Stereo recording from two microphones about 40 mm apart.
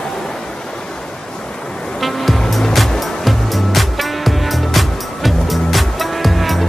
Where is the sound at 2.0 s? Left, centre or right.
Centre.